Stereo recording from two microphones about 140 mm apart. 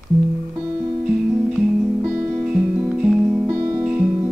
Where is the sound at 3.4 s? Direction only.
20° right (ahead or behind).